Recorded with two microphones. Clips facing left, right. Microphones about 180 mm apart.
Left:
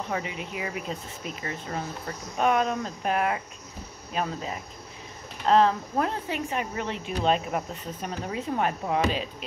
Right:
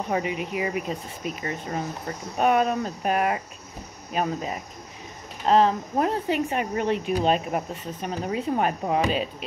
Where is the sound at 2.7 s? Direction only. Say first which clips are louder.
Right 3 dB; 65° right (ahead or behind).